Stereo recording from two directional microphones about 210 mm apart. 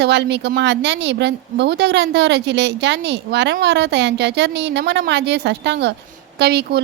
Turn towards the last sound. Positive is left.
turn(degrees=-50)  # may be behind; listen again after turning